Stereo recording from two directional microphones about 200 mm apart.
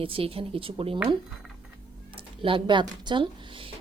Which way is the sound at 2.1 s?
25° right (ahead or behind).